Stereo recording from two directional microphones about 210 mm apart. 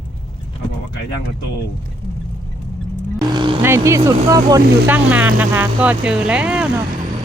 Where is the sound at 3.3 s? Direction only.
20° right (ahead or behind).